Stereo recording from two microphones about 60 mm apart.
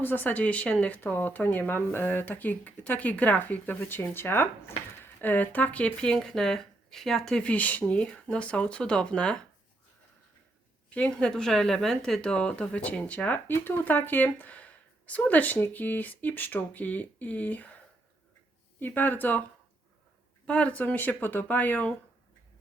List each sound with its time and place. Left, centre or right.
0.0 s speech: left
1.0 s speech: left; by 7.4 s centre
7.4 s speech: left
10.8 s speech: left
18.8 s speech: left
20.5 s speech: left